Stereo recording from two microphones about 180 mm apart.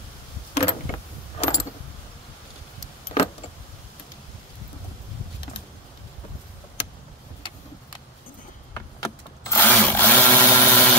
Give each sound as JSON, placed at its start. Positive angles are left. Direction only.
{"t": 0.6, "sound": "keys jangling", "side_deg": 30}
{"t": 8.7, "sound": "sewing machine", "side_deg": 15}